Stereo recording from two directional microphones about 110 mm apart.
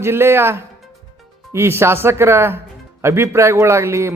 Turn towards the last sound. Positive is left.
turn(degrees=-25)  # may be behind; listen again after turning